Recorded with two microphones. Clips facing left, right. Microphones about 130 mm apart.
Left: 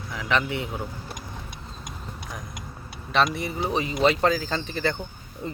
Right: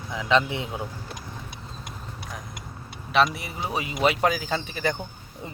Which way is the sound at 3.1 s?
5° right (ahead or behind).